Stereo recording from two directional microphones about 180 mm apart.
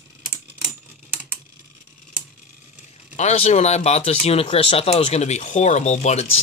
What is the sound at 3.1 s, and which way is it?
Speech, 35° left (ahead or behind).